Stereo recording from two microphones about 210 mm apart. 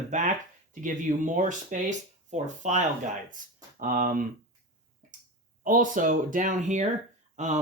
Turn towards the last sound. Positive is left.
turn(degrees=-35)  # may be behind; listen again after turning